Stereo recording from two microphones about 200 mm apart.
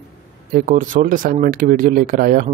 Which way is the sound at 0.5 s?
45° right (ahead or behind).